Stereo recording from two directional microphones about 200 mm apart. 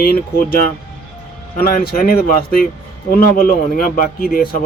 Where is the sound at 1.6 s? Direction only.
45° left (ahead or behind).